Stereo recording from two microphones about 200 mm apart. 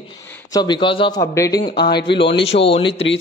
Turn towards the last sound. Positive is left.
turn(degrees=30)  # may be behind; listen again after turning